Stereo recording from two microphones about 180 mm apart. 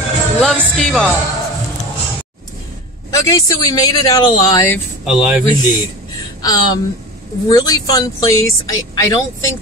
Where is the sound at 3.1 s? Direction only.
20° left (ahead or behind).